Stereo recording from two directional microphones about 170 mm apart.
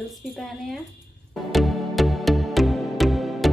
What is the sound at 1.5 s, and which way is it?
Music, centre (ahead or behind).